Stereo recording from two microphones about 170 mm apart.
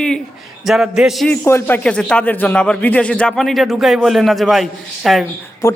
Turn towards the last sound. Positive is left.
turn(degrees=20)  # may be behind; listen again after turning